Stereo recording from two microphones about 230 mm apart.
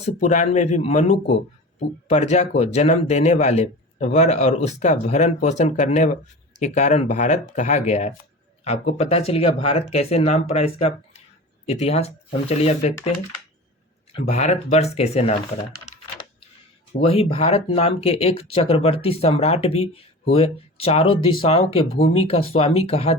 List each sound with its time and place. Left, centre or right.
0.0 s speech: left
14.2 s speech: left
17.0 s speech: left